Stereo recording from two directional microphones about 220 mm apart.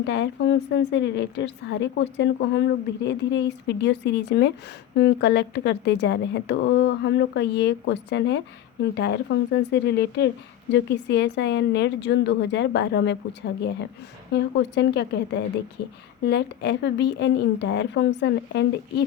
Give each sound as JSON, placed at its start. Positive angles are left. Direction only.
{"t": 0.0, "sound": "a woman's voice", "side_deg": 55}
{"t": 14.3, "sound": "a woman's voice", "side_deg": 50}